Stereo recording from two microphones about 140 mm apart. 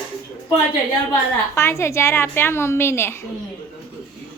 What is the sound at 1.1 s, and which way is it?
A woman's voice, 20° left (ahead or behind).